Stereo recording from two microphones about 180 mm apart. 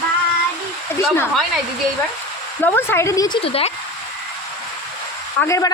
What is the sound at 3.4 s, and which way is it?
Speech, 30° left (ahead or behind).